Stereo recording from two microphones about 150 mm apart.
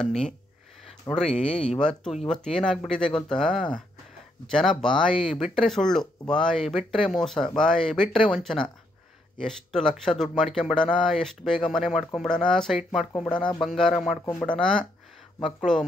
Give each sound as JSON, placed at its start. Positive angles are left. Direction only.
{"t": 0.0, "sound": "speech", "side_deg": 5}
{"t": 1.1, "sound": "speech", "side_deg": 25}
{"t": 1.4, "sound": "speech", "side_deg": 5}